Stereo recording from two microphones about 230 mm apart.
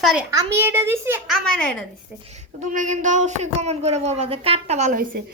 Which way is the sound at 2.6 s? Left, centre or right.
Right.